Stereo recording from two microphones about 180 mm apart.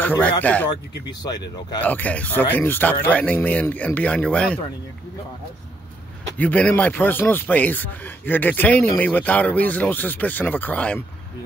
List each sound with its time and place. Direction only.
0.0 s speech: 10° left (ahead or behind)
1.0 s speech: 20° left (ahead or behind)
1.8 s speech: 10° left (ahead or behind)
6.3 s speech: 10° left (ahead or behind)